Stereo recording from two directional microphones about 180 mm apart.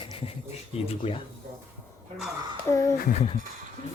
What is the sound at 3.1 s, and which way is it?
Speech, 35° left (ahead or behind).